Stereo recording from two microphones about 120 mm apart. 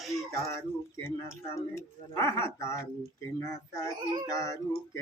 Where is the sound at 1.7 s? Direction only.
20° left (ahead or behind).